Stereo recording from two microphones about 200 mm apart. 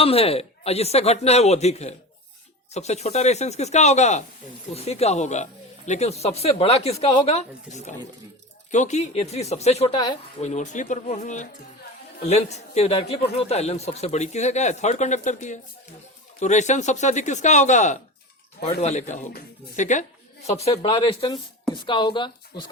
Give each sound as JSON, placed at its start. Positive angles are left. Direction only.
{"t": 0.0, "sound": "speech", "side_deg": 30}
{"t": 10.4, "sound": "speech", "side_deg": 35}